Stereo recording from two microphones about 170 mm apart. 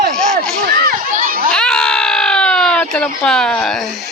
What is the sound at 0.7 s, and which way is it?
Children playing, 60° right (ahead or behind).